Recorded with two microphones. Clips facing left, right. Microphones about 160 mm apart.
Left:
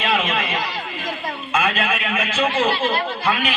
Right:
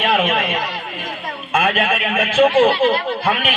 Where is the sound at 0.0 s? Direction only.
55° right (ahead or behind).